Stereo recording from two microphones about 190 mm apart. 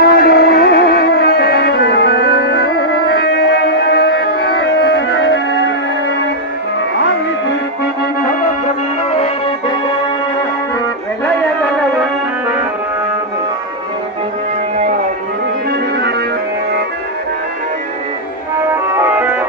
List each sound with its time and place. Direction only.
0.0 s music: 55° left (ahead or behind); by 5.4 s 85° left
9.1 s music: 30° left (ahead or behind)
12.0 s music: 10° right (ahead or behind)
18.7 s music: 10° right (ahead or behind)